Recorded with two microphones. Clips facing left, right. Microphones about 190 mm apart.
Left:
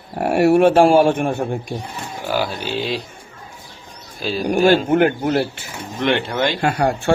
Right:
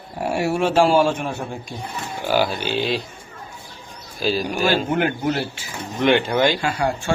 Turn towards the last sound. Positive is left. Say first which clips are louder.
# left 4 dB
turn(degrees=60)  # may be behind; listen again after turning